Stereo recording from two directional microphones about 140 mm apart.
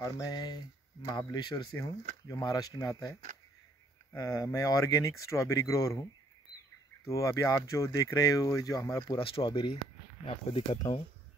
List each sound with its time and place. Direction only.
0.0 s speech: 25° left (ahead or behind)
4.2 s speech: 25° left (ahead or behind)
7.1 s speech: 20° left (ahead or behind); by 10.8 s 40° left (ahead or behind)